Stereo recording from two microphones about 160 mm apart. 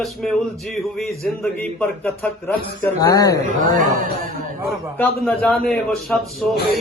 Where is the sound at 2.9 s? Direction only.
20° left (ahead or behind).